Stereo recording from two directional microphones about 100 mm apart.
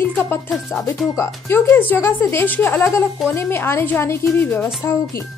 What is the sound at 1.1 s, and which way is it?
A woman's voice, 20° left (ahead or behind).